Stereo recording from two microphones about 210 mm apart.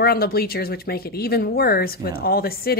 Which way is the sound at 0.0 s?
45° left (ahead or behind).